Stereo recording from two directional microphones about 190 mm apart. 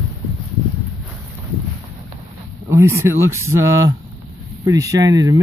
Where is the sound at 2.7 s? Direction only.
15° right (ahead or behind).